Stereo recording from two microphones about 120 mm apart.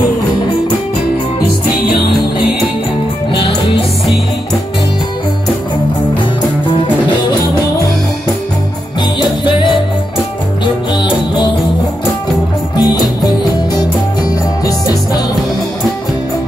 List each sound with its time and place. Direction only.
9.2 s music: 40° left (ahead or behind)
12.7 s music: 35° left (ahead or behind)